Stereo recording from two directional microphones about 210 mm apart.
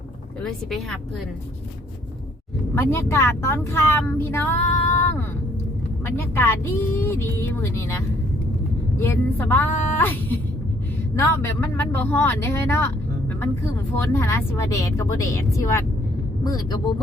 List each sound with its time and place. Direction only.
0.4 s speech: 5° left (ahead or behind)
2.7 s speech: 10° left (ahead or behind)
14.0 s speech: 10° left (ahead or behind)